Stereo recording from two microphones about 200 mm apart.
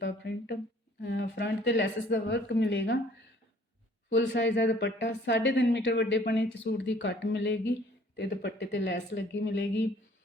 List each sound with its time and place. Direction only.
0.0 s a woman's voice: 55° left (ahead or behind)
4.1 s a woman's voice: 65° left (ahead or behind)